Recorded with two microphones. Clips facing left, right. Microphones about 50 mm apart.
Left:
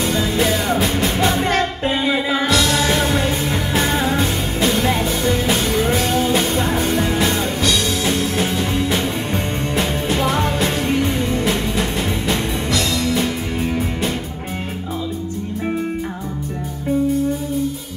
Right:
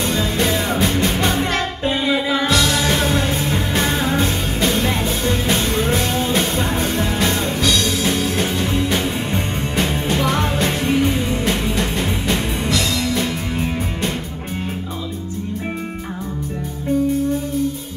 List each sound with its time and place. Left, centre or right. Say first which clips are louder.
0.0 s music: left 1 dB; centre
1.9 s music: right 3 dB; left; by 10.7 s centre
10.8 s music: right 1 dB; centre
11.4 s music: even; centre